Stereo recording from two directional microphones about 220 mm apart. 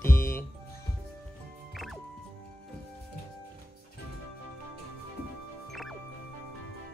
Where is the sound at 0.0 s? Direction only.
10° left (ahead or behind).